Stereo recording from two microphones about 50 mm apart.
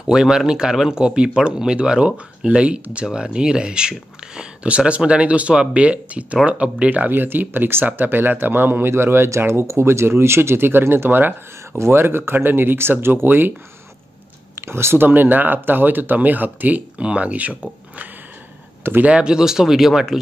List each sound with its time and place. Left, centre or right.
0.0 s speech: centre
7.1 s speech: right
11.8 s speech: right
14.5 s speech: right
15.0 s speech: right; by 20.2 s centre